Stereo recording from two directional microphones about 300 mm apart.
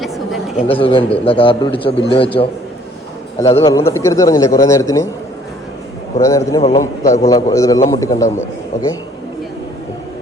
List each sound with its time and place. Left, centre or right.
0.0 s a sound: centre
0.7 s a man's voice: centre
6.1 s a man's voice: centre